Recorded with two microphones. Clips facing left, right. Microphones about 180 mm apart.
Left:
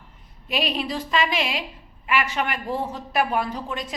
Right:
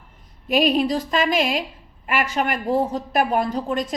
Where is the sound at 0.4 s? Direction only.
45° right (ahead or behind).